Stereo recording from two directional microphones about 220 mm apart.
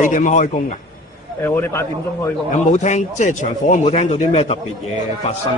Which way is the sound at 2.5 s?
30° left (ahead or behind).